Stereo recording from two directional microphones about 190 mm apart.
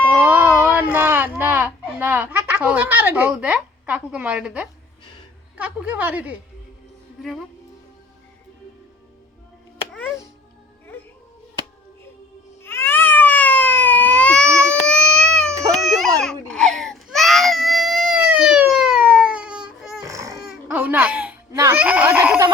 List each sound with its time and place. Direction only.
0.1 s a sound: 10° right (ahead or behind)
5.5 s a woman's voice: 10° right (ahead or behind)
12.6 s a sound: 10° left (ahead or behind)
15.1 s baby cry: 5° left (ahead or behind)
15.4 s baby cry: 15° right (ahead or behind)
15.7 s baby cry: centre (ahead or behind)
20.1 s baby cry: 15° right (ahead or behind)
20.5 s baby laughter: 5° right (ahead or behind)
21.5 s a sound: 15° right (ahead or behind)